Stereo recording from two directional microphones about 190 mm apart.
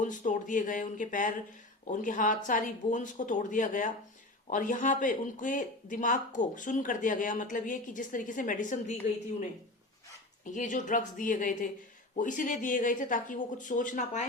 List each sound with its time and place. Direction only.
0.0 s speech: 40° left (ahead or behind)
10.4 s speech: 40° left (ahead or behind)